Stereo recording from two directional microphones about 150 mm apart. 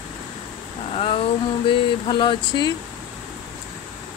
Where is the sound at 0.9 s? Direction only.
40° left (ahead or behind).